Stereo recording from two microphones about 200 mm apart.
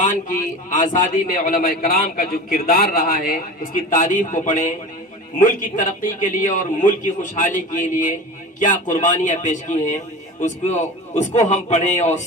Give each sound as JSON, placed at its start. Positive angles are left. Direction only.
{"t": 0.0, "sound": "a man's voice", "side_deg": 40}